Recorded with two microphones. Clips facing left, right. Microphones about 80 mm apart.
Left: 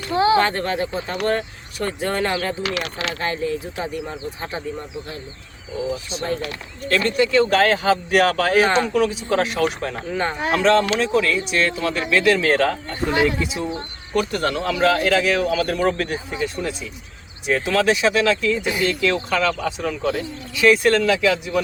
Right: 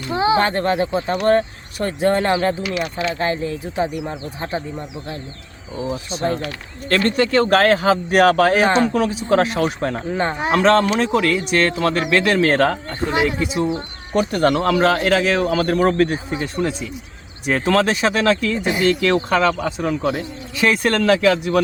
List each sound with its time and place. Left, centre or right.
0.1 s speech: right
2.6 s mechanisms: left
3.2 s speech: right
3.8 s speech: centre
5.9 s speech: right
8.1 s speech: right
10.3 s speech: centre
10.6 s speech: right
13.1 s speech: right
14.4 s speech: right
14.8 s speech: right
17.4 s speech: right
20.1 s speech: right
20.7 s speech: right